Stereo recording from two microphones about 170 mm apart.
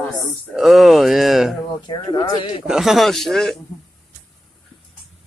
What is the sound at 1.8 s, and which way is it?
Speech, 30° left (ahead or behind).